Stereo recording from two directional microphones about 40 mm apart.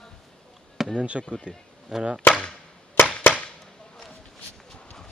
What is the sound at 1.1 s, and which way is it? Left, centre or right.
Speech, right.